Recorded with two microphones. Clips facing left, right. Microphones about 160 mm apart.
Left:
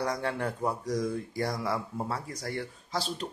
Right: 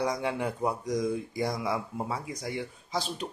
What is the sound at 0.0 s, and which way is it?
Speech, 15° right (ahead or behind).